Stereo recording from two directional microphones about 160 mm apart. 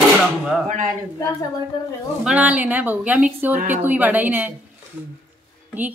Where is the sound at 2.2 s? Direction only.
5° right (ahead or behind).